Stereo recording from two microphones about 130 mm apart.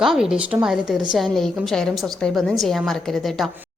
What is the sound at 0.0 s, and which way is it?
A woman's voice, 5° right (ahead or behind).